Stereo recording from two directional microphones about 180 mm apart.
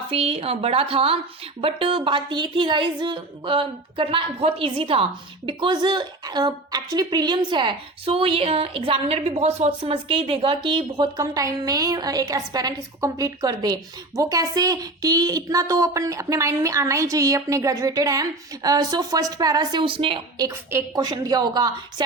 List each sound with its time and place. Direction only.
0.1 s a woman's voice: 30° right (ahead or behind)
20.5 s a woman's voice: 15° right (ahead or behind)